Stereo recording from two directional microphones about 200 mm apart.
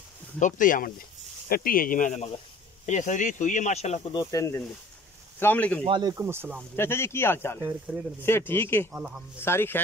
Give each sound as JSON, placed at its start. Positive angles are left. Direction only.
{"t": 0.4, "sound": "speech", "side_deg": 40}
{"t": 4.2, "sound": "speech", "side_deg": 15}
{"t": 5.9, "sound": "speech", "side_deg": -20}
{"t": 6.8, "sound": "speech", "side_deg": 10}
{"t": 8.9, "sound": "speech", "side_deg": -5}
{"t": 9.4, "sound": "speech", "side_deg": 10}